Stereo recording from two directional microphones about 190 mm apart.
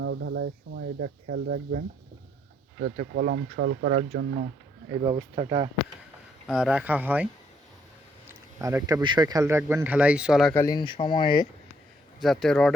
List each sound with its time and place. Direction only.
0.0 s speech: 85° right; by 1.8 s 55° right (ahead or behind)
2.8 s speech: 55° right (ahead or behind)
5.0 s speech: 25° right (ahead or behind)
6.5 s speech: 5° right (ahead or behind)
8.6 s speech: 15° right (ahead or behind)
10.5 s speech: 15° left (ahead or behind)
12.2 s speech: centre (ahead or behind)